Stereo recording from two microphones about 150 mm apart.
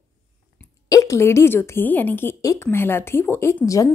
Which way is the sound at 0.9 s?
20° left (ahead or behind).